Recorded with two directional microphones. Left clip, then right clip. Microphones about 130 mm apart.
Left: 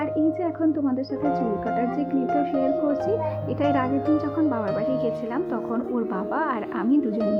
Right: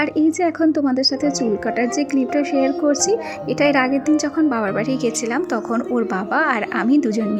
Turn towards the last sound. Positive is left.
turn(degrees=-35)  # may be behind; listen again after turning